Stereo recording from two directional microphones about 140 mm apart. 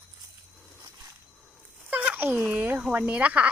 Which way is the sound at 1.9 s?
10° right (ahead or behind).